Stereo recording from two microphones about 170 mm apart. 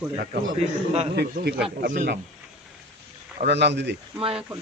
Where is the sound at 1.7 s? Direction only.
55° right (ahead or behind).